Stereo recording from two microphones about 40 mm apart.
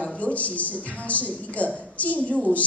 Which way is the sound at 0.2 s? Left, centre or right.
Left.